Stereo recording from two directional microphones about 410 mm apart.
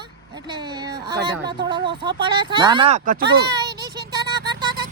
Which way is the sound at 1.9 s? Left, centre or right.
Centre.